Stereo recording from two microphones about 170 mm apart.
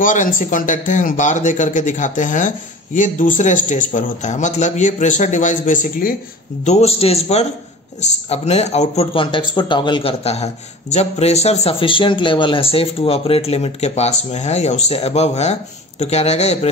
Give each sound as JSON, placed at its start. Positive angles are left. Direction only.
{"t": 0.0, "sound": "a man's voice", "side_deg": 50}
{"t": 6.6, "sound": "speech", "side_deg": 40}